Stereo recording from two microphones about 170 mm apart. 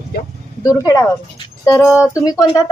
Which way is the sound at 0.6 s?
20° left (ahead or behind).